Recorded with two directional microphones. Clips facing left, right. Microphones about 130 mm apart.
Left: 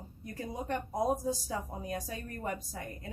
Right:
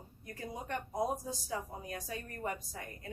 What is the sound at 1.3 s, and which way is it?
Speech, 35° left (ahead or behind).